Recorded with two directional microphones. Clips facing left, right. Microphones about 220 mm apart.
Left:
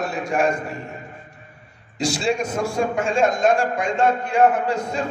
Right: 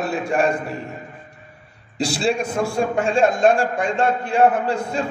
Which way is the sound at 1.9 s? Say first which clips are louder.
Right 1 dB; 30° right (ahead or behind).